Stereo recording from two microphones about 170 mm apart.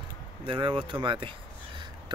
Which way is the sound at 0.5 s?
30° right (ahead or behind).